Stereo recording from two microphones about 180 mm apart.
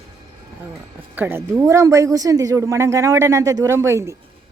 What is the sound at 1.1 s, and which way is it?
Speech, 10° right (ahead or behind).